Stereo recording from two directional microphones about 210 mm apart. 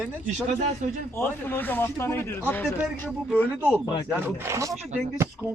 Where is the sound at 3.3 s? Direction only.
5° right (ahead or behind).